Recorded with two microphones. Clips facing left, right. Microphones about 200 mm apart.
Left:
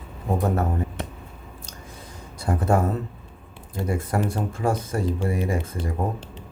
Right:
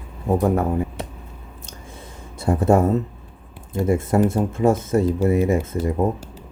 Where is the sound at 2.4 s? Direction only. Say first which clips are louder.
Right 5 dB; 25° right (ahead or behind).